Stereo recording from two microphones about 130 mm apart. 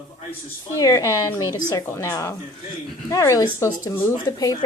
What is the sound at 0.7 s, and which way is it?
A woman's voice, 25° left (ahead or behind).